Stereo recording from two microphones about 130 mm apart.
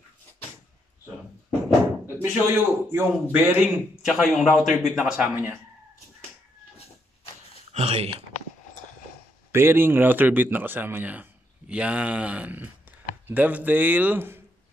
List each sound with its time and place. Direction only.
2.2 s a man's voice: 15° right (ahead or behind)
5.1 s speech: 15° right (ahead or behind)
7.7 s speech: 55° right (ahead or behind)
9.5 s speech: 20° right (ahead or behind)